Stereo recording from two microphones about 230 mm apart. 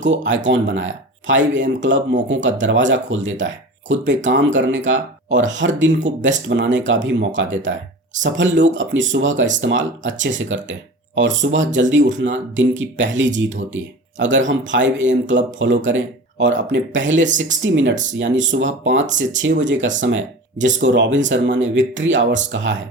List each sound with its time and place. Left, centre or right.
0.1 s speech: right